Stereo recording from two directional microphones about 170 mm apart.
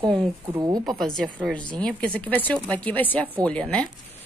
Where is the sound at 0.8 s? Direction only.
Centre (ahead or behind).